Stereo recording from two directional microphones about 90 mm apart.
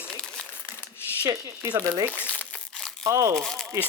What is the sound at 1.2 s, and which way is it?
Speech, 40° right (ahead or behind).